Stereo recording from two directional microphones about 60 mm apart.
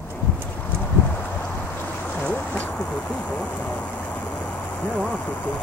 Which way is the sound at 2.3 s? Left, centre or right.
Left.